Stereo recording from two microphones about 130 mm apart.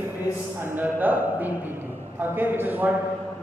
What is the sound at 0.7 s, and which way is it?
A man's voice, 15° right (ahead or behind).